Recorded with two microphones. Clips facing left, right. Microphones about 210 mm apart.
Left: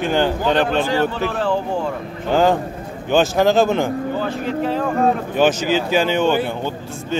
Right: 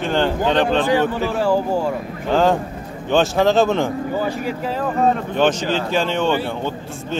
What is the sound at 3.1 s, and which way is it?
A man's voice, 5° left (ahead or behind).